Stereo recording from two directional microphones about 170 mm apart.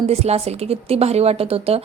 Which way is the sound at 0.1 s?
40° right (ahead or behind).